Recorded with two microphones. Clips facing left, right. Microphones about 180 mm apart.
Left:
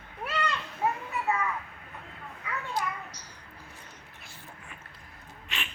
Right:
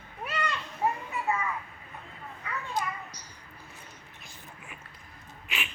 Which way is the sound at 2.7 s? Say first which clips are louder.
Right 1 dB; 10° right (ahead or behind).